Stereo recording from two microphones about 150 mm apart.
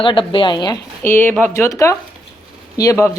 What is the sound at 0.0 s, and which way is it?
Speech, 35° left (ahead or behind).